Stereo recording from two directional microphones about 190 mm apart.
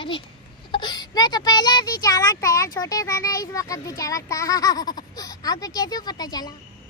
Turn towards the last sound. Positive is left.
turn(degrees=20)  # may be behind; listen again after turning